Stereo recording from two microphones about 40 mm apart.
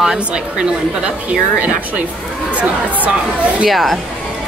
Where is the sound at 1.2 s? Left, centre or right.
Right.